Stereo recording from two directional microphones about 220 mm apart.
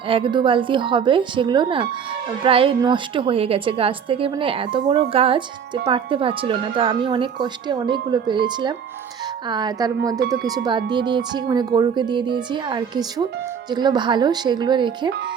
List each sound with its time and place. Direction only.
0.1 s speech: 20° right (ahead or behind)